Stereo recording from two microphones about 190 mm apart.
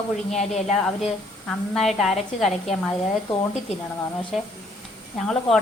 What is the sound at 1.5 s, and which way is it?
A woman's voice, centre (ahead or behind).